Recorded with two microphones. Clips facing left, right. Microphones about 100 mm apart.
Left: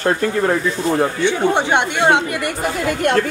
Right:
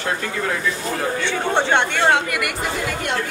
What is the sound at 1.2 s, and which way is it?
Speech, 15° left (ahead or behind).